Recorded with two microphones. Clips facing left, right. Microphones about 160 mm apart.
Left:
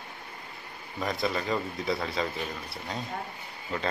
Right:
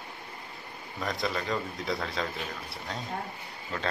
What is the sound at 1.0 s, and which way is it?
A man's voice, centre (ahead or behind).